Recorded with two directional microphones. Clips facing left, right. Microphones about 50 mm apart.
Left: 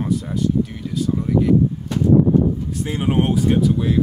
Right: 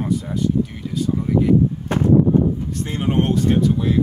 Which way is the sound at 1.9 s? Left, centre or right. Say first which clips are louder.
Right 2 dB; right.